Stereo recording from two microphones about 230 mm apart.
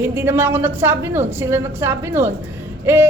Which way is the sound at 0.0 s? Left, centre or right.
Centre.